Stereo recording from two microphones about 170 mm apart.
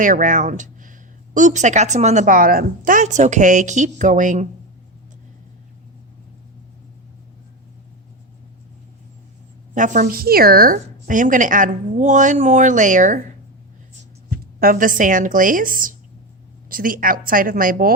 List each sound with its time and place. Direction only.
0.0 s speech: 50° right (ahead or behind)
9.7 s speech: 45° right (ahead or behind)
14.3 s a woman's voice: 60° right (ahead or behind)